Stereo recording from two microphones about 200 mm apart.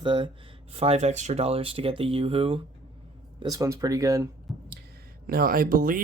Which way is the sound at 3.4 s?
20° right (ahead or behind).